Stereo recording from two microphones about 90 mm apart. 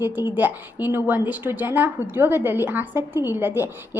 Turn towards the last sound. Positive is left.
turn(degrees=-25)  # may be behind; listen again after turning